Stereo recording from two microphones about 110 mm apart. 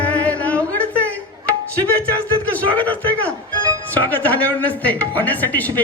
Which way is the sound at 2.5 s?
15° left (ahead or behind).